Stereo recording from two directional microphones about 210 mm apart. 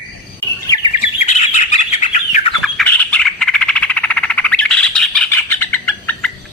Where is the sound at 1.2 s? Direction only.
35° left (ahead or behind).